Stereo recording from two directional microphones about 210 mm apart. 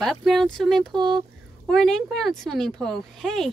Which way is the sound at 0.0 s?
Centre (ahead or behind).